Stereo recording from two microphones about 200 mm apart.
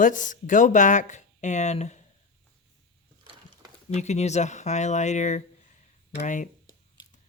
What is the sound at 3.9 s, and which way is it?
Speech, 35° left (ahead or behind).